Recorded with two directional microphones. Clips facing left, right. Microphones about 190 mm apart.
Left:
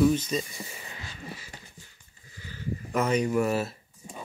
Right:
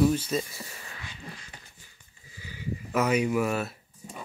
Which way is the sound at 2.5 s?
10° right (ahead or behind).